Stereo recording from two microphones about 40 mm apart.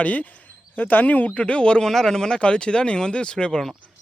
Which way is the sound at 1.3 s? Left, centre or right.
Left.